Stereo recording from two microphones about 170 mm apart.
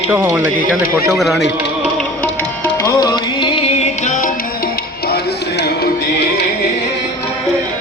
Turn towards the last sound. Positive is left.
turn(degrees=70)  # may be behind; listen again after turning